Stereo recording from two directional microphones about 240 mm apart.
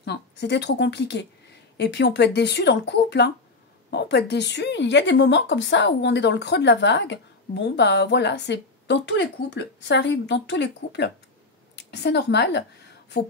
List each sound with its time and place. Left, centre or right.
0.0 s a woman's voice: left